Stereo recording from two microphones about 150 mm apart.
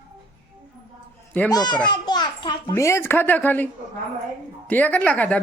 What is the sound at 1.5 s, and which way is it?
A child's voice, 30° left (ahead or behind).